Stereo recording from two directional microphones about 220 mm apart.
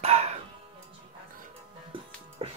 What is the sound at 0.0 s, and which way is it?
Music, 30° right (ahead or behind).